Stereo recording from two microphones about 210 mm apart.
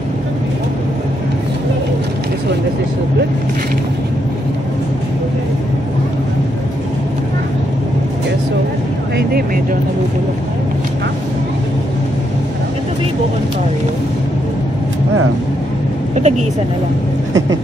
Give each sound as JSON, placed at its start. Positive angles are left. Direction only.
{"t": 16.2, "sound": "vehicle", "side_deg": -35}